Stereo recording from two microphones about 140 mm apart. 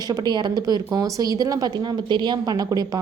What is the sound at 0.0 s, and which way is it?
A woman's voice, 30° right (ahead or behind).